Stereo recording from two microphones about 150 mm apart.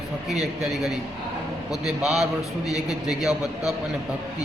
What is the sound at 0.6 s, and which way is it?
Speech, 5° right (ahead or behind).